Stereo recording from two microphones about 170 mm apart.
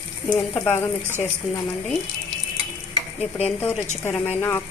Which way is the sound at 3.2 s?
40° left (ahead or behind).